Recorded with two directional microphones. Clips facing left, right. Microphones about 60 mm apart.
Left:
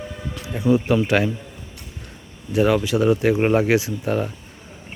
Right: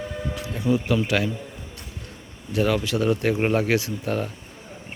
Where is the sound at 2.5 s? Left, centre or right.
Centre.